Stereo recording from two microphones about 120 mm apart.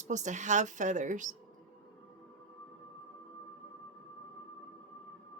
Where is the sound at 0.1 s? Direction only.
90° right.